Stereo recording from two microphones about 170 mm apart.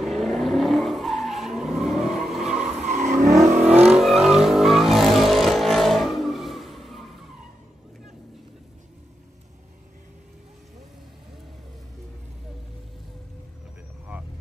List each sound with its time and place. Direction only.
0.0 s vehicle: centre (ahead or behind)
2.9 s vehicle: 45° right (ahead or behind)
3.7 s vehicle: 5° right (ahead or behind)